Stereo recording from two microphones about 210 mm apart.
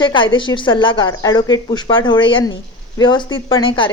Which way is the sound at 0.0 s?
25° left (ahead or behind).